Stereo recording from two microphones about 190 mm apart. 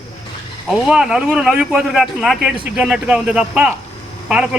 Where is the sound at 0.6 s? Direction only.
Centre (ahead or behind).